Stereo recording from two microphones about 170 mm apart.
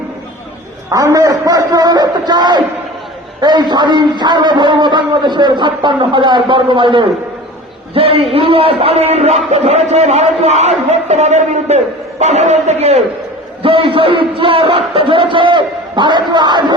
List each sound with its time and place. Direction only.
0.9 s a man's voice: 20° right (ahead or behind)